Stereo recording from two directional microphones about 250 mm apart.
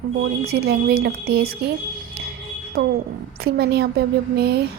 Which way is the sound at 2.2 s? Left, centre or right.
Right.